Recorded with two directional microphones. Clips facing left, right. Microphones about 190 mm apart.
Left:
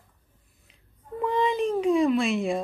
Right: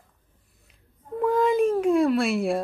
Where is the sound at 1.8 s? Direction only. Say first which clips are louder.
Right 1 dB; 5° right (ahead or behind).